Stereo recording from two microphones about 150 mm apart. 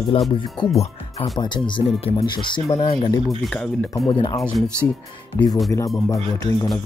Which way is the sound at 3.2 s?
5° left (ahead or behind).